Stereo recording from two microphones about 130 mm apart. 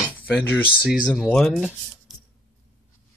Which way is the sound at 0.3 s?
15° left (ahead or behind).